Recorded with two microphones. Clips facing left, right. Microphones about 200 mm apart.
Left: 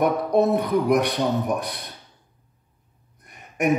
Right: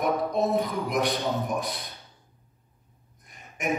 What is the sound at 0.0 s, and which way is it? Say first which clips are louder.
Speech: left 6 dB; 65° left (ahead or behind).